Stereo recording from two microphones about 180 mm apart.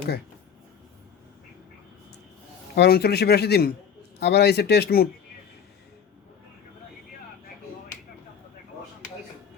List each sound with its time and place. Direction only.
2.7 s speech: 60° left (ahead or behind)